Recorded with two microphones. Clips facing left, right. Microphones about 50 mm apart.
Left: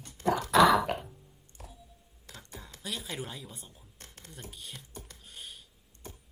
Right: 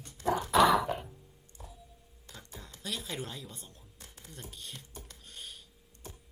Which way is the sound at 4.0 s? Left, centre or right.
Left.